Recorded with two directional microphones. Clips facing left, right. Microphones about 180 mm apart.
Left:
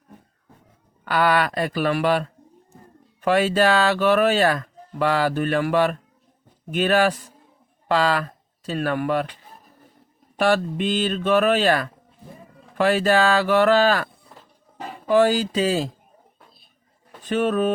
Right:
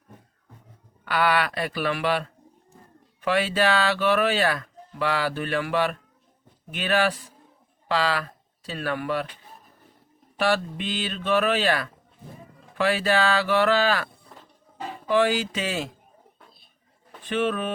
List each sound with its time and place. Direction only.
1.0 s speech: 45° left (ahead or behind)
10.3 s speech: 45° left (ahead or behind)
14.3 s a sound: centre (ahead or behind)
15.0 s speech: 40° left (ahead or behind)
17.2 s speech: 40° left (ahead or behind)